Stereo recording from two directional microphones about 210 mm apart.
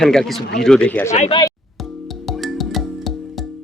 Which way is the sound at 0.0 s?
Centre (ahead or behind).